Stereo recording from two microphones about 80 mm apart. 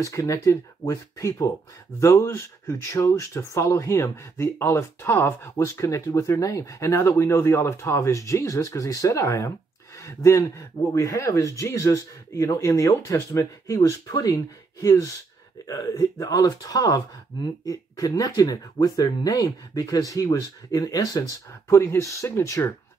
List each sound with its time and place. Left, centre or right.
0.0 s speech: left
21.6 s speech: left